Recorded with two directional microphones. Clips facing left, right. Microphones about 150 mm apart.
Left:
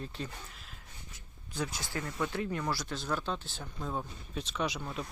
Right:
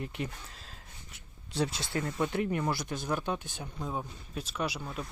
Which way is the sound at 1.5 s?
25° right (ahead or behind).